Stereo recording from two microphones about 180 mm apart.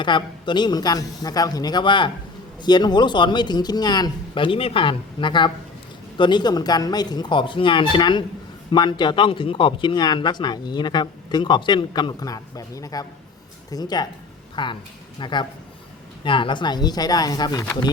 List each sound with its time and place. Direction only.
0.0 s speech: 25° left (ahead or behind)